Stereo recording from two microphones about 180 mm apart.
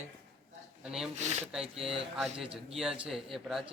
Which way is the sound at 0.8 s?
5° right (ahead or behind).